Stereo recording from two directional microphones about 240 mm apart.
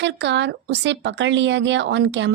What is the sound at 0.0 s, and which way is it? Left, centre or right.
A woman's voice, right.